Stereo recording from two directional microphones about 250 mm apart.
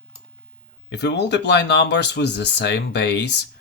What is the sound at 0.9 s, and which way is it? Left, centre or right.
Speech, left.